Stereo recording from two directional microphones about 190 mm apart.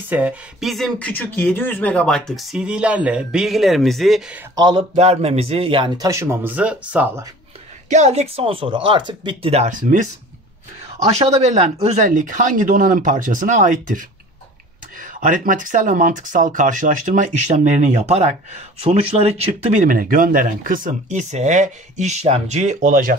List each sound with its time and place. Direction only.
0.1 s speech: 5° right (ahead or behind)
4.6 s speech: 25° right (ahead or behind)
4.9 s speech: 35° right (ahead or behind); by 7.2 s 5° right (ahead or behind)
7.9 s speech: 35° right (ahead or behind)
11.1 s speech: 35° right (ahead or behind)